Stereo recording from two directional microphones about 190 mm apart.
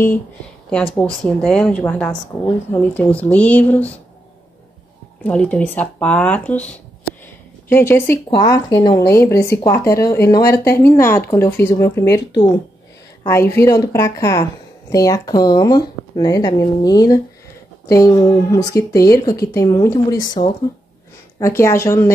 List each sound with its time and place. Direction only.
0.9 s speech: 5° left (ahead or behind)
5.2 s speech: 5° left (ahead or behind)
7.7 s speech: 10° left (ahead or behind)
13.6 s speech: 15° left (ahead or behind)